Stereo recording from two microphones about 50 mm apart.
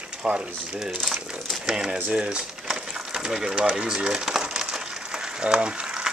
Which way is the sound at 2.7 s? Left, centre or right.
Centre.